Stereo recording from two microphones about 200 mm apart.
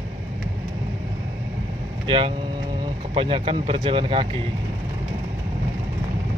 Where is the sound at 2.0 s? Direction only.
25° right (ahead or behind).